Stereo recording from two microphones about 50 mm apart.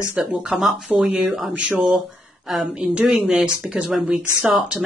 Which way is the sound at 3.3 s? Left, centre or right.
Centre.